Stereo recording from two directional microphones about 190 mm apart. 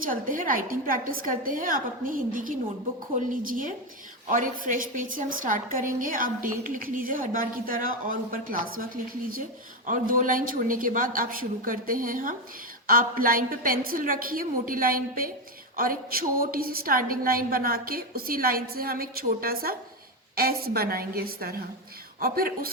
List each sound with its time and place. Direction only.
0.0 s a woman's voice: 45° right (ahead or behind)